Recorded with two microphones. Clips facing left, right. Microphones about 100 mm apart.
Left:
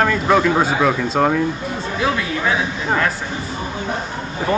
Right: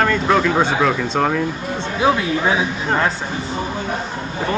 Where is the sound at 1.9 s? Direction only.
25° right (ahead or behind).